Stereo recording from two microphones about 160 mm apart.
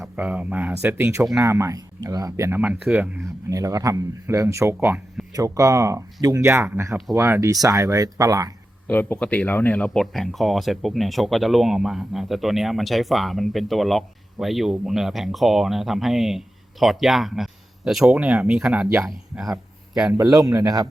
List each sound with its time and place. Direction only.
0.0 s speech: 10° right (ahead or behind)
8.9 s speech: 10° left (ahead or behind); by 18.9 s 5° right (ahead or behind)
18.9 s speech: 20° right (ahead or behind)
20.1 s speech: 20° right (ahead or behind)